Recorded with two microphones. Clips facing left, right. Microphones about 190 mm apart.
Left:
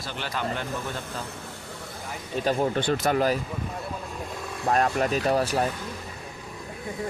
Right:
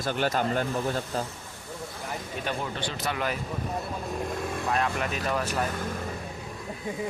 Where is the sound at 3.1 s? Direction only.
35° left (ahead or behind).